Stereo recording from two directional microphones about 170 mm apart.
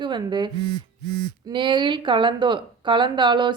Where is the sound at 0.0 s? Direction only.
25° right (ahead or behind).